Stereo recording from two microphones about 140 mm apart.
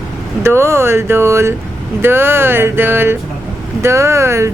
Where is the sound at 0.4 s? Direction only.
20° right (ahead or behind).